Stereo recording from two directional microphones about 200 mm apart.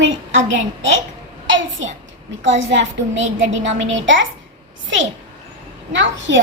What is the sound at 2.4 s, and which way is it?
A child's voice, 70° right (ahead or behind).